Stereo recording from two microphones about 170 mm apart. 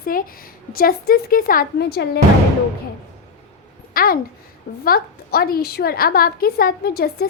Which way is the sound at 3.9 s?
60° left (ahead or behind).